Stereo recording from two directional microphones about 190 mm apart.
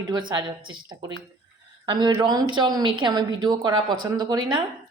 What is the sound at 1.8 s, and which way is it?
Speech, 25° right (ahead or behind).